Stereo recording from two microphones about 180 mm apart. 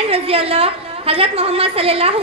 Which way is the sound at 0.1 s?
30° right (ahead or behind).